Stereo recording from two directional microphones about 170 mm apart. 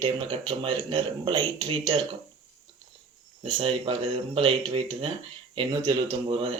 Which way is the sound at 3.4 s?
30° right (ahead or behind).